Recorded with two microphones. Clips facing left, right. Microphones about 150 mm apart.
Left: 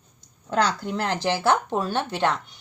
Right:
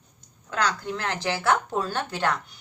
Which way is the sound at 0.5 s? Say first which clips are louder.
Left 4 dB; 30° left (ahead or behind).